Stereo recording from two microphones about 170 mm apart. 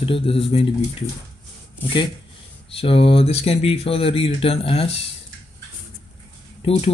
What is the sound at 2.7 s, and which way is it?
Speech, 35° left (ahead or behind).